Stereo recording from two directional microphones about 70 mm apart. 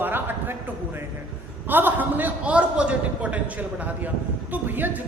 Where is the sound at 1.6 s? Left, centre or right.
Right.